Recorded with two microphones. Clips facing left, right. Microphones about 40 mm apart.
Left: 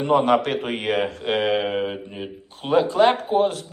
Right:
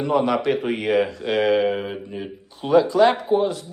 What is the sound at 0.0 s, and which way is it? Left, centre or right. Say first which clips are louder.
A man's voice: left 2 dB; left.